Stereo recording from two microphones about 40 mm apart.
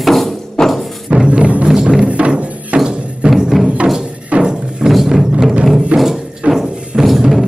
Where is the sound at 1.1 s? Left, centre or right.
Right.